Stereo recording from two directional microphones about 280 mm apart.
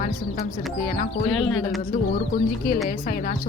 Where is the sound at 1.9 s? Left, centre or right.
Left.